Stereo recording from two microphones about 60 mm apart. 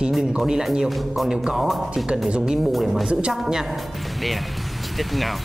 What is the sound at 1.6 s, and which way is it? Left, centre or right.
Speech, centre.